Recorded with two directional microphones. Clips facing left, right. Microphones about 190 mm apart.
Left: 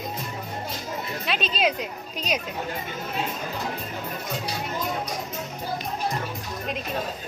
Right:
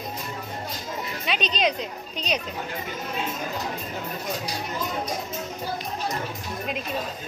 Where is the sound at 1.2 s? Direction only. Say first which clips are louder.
Even; centre (ahead or behind).